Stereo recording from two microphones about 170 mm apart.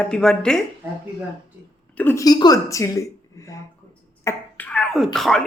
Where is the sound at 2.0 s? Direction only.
15° left (ahead or behind).